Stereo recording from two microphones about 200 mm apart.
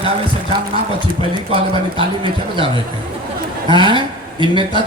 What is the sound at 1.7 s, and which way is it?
A man's voice, 25° right (ahead or behind).